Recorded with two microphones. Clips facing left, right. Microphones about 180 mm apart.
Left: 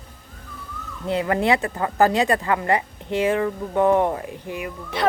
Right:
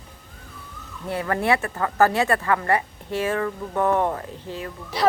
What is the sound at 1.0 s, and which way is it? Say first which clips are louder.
Speech: left 3 dB; 20° left (ahead or behind).